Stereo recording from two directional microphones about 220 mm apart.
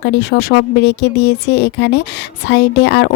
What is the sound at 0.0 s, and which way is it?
Speech, 45° left (ahead or behind).